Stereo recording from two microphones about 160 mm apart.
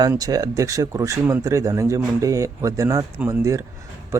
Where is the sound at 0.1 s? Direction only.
20° right (ahead or behind).